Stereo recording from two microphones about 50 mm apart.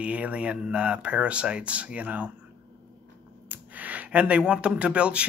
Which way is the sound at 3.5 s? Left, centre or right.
Right.